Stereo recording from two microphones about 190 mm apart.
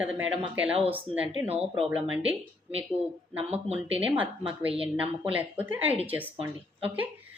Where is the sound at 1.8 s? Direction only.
5° right (ahead or behind).